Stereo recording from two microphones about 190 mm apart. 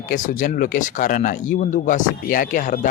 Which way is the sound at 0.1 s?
45° left (ahead or behind).